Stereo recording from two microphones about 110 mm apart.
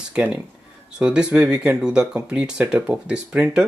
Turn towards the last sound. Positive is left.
turn(degrees=-10)  # may be behind; listen again after turning